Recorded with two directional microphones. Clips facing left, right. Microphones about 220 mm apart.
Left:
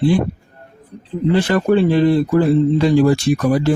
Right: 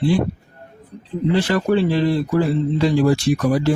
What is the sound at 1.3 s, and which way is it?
Speech, 55° left (ahead or behind).